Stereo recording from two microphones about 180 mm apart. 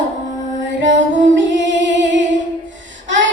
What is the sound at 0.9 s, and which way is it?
Music, 90° right.